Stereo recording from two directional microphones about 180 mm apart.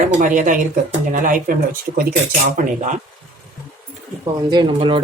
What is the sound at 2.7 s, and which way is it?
Speech, 40° right (ahead or behind).